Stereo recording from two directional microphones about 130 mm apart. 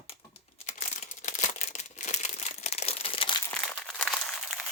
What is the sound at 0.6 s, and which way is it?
Crumpling, 70° left (ahead or behind).